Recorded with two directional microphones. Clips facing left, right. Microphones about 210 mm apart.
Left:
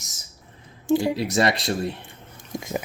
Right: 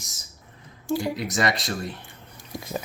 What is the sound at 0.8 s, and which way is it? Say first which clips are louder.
Speech: left 5 dB; 25° left (ahead or behind).